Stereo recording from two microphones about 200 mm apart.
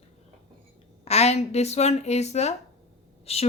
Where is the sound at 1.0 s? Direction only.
35° left (ahead or behind).